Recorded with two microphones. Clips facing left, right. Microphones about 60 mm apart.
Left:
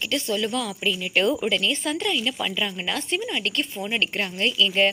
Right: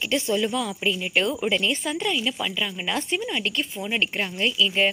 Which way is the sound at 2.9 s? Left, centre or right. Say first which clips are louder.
Right 3 dB; centre.